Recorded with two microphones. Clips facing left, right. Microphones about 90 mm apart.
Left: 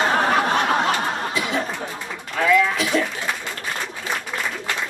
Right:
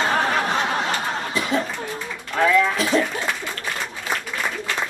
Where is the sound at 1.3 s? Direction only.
35° right (ahead or behind).